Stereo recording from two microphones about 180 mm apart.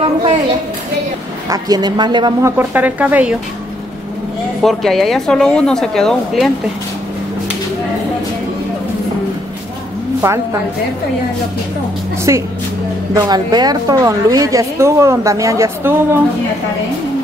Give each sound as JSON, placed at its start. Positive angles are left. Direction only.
{"t": 1.5, "sound": "speech", "side_deg": -20}
{"t": 2.7, "sound": "a woman's voice", "side_deg": -10}
{"t": 4.6, "sound": "a woman's voice", "side_deg": 0}
{"t": 10.2, "sound": "a woman's voice", "side_deg": -10}
{"t": 12.3, "sound": "a woman's voice", "side_deg": -20}